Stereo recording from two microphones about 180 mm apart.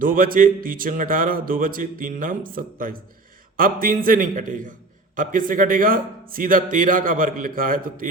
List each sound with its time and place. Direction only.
0.0 s speech: 50° right (ahead or behind)